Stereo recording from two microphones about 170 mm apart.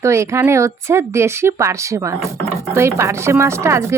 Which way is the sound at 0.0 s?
15° right (ahead or behind).